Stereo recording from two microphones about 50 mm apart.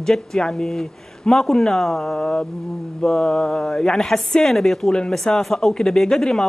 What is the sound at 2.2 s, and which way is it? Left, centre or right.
Speech, centre.